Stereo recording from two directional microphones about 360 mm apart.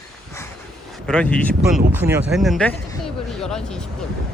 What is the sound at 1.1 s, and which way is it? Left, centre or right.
Speech, centre.